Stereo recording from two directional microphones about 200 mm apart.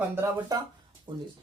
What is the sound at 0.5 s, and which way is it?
Speech, 20° right (ahead or behind).